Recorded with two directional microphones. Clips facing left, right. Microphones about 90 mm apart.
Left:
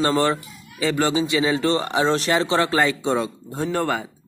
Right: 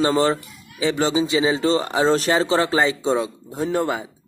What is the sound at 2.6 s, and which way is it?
Speech, 20° right (ahead or behind).